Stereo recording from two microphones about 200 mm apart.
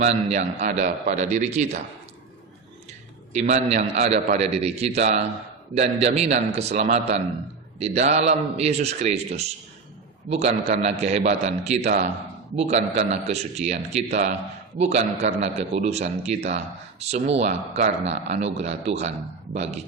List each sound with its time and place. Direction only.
0.0 s a man's voice: 35° right (ahead or behind)
3.3 s a man's voice: 35° right (ahead or behind)
12.7 s a man's voice: 35° right (ahead or behind)